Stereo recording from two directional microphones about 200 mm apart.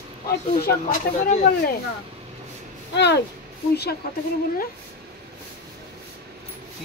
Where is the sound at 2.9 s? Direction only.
60° left (ahead or behind).